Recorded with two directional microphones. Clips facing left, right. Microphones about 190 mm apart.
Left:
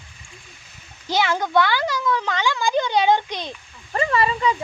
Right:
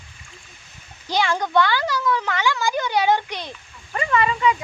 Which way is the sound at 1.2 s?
5° left (ahead or behind).